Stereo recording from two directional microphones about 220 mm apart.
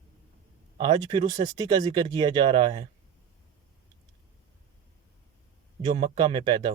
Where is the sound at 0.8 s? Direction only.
20° right (ahead or behind).